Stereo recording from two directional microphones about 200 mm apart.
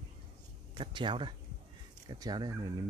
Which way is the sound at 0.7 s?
25° right (ahead or behind).